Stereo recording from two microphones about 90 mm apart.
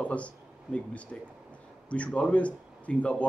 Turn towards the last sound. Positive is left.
turn(degrees=15)  # may be behind; listen again after turning